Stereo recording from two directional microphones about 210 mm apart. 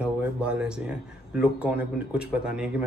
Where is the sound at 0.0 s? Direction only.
5° right (ahead or behind).